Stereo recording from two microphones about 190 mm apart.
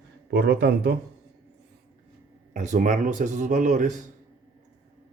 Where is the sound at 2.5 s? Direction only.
40° right (ahead or behind).